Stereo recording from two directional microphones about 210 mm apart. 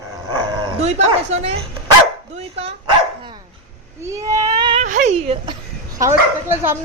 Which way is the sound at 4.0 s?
15° right (ahead or behind).